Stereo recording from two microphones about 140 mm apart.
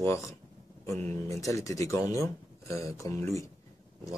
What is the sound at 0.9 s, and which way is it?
Speech, 50° right (ahead or behind).